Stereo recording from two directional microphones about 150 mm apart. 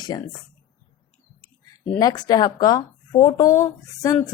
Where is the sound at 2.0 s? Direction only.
25° left (ahead or behind).